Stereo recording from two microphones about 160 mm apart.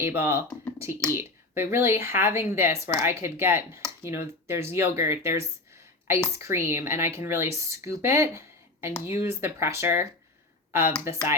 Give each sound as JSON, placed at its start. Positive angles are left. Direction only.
{"t": 0.0, "sound": "speech", "side_deg": -15}